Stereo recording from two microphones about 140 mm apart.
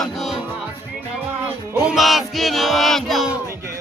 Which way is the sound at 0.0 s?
Centre (ahead or behind).